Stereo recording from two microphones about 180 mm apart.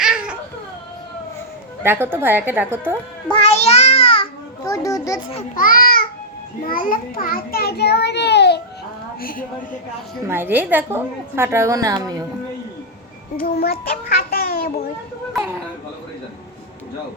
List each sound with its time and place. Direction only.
0.0 s cat: 5° right (ahead or behind)
1.8 s a woman's voice: 10° right (ahead or behind)
3.2 s a child's voice: 30° left (ahead or behind)
4.6 s a child's voice: 20° left (ahead or behind)
5.5 s a child's voice: 50° left (ahead or behind); by 8.6 s 70° left (ahead or behind)
9.2 s a child's voice: 50° left (ahead or behind)
10.2 s a woman's voice: 10° right (ahead or behind)
13.3 s a child's voice: 60° left (ahead or behind)